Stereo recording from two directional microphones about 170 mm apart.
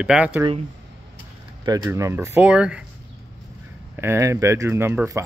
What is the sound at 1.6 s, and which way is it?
Speech, 20° right (ahead or behind).